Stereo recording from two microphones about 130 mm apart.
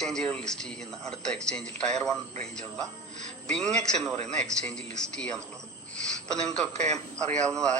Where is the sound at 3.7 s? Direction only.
5° left (ahead or behind).